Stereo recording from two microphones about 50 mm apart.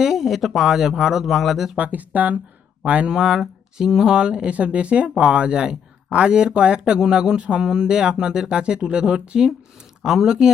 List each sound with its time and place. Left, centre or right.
0.0 s speech: centre
1.7 s speech: right
3.2 s speech: centre